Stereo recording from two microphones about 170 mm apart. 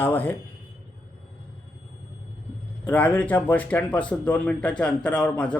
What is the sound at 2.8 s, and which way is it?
Speech, 10° left (ahead or behind).